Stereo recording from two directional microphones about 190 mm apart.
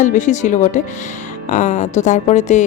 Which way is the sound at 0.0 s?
40° left (ahead or behind).